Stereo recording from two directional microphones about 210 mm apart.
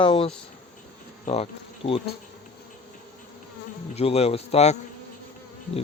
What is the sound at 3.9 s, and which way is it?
Speech, 30° left (ahead or behind).